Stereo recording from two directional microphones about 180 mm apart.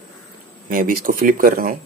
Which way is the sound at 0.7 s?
50° right (ahead or behind).